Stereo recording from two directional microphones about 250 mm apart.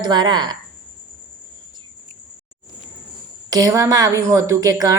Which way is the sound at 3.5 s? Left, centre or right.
Centre.